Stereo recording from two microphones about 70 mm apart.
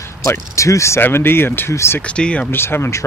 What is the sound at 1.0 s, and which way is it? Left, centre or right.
Speech, left.